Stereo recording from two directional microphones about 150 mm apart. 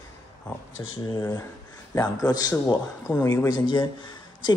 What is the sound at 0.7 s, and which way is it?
Speech, 25° left (ahead or behind).